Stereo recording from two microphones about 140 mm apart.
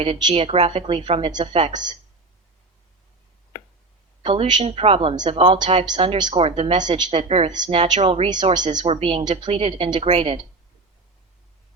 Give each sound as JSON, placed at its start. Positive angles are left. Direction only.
{"t": 0.0, "sound": "a woman's voice", "side_deg": -35}
{"t": 4.2, "sound": "a woman's voice", "side_deg": -35}
{"t": 7.1, "sound": "speech", "side_deg": -45}
{"t": 7.5, "sound": "a woman's voice", "side_deg": -30}
{"t": 7.9, "sound": "speech", "side_deg": -45}
{"t": 8.5, "sound": "a woman's voice", "side_deg": -30}
{"t": 8.8, "sound": "a woman's voice", "side_deg": -45}